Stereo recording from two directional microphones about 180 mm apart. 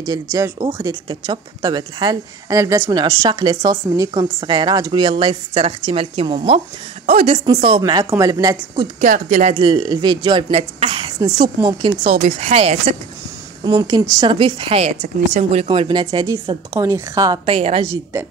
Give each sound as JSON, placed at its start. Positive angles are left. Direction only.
{"t": 0.0, "sound": "a woman's voice", "side_deg": -20}
{"t": 9.0, "sound": "speech", "side_deg": -40}
{"t": 9.6, "sound": "a woman's voice", "side_deg": -25}
{"t": 13.7, "sound": "a woman's voice", "side_deg": -20}
{"t": 17.6, "sound": "a woman's voice", "side_deg": -40}